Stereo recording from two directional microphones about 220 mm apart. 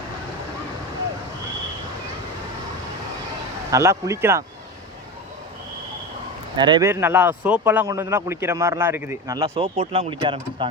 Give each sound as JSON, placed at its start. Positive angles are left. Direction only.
{"t": 3.7, "sound": "speech", "side_deg": -15}
{"t": 6.6, "sound": "speech", "side_deg": -20}
{"t": 9.6, "sound": "speech", "side_deg": -25}